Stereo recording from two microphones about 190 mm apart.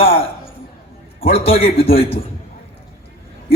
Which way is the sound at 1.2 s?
30° left (ahead or behind).